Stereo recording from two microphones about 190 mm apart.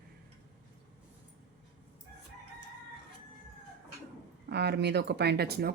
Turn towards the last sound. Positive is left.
turn(degrees=-55)  # may be behind; listen again after turning